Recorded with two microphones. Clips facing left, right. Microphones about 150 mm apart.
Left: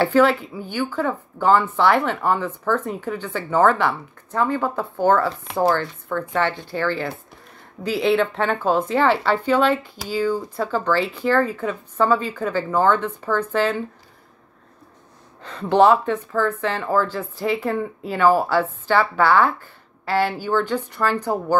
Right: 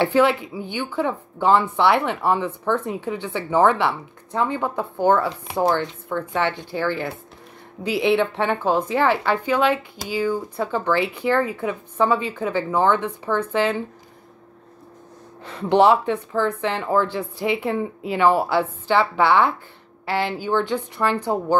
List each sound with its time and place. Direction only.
0.0 s speech: 15° right (ahead or behind)
15.4 s speech: 15° right (ahead or behind)